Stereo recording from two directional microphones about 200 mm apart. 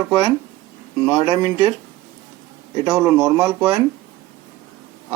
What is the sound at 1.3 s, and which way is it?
Speech, 20° right (ahead or behind).